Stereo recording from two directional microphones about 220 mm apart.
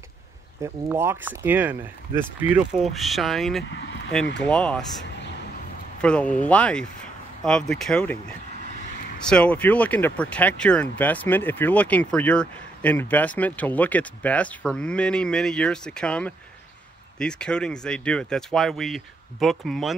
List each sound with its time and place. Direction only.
0.6 s speech: 10° right (ahead or behind)
3.7 s a sound: 50° left (ahead or behind)
4.4 s speech: 5° left (ahead or behind)
5.9 s speech: 5° left (ahead or behind)
9.3 s speech: 5° left (ahead or behind)